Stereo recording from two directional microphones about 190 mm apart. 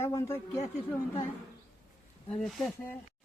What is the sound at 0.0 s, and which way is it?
Speech, 15° left (ahead or behind).